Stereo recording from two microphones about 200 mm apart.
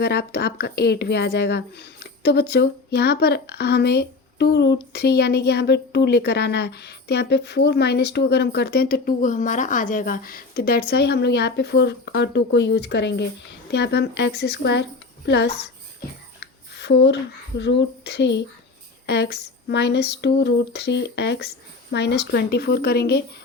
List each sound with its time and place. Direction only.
0.0 s a woman's voice: 55° left (ahead or behind)
16.4 s a sound: 60° left (ahead or behind)
17.6 s a woman's voice: 60° left (ahead or behind)